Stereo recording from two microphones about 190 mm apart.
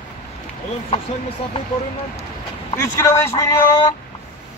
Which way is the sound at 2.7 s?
15° left (ahead or behind).